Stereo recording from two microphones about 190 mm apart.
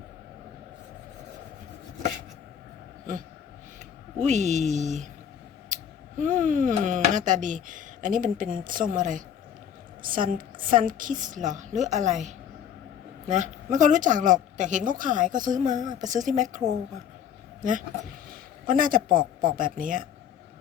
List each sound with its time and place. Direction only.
4.2 s a woman's voice: 40° right (ahead or behind)